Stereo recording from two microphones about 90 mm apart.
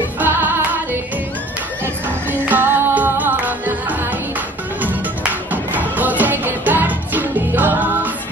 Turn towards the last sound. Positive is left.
turn(degrees=-20)  # may be behind; listen again after turning